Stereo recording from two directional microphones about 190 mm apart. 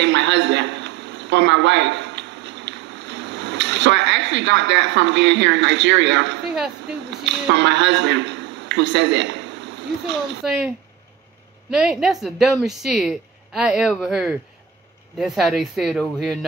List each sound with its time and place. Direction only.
0.0 s a sound: 70° right (ahead or behind)
7.2 s a man's voice: 70° right (ahead or behind)
10.4 s a woman's voice: 5° right (ahead or behind)
11.7 s a woman's voice: centre (ahead or behind)